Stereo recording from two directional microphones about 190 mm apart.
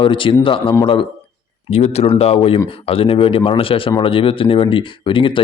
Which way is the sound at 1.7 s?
30° left (ahead or behind).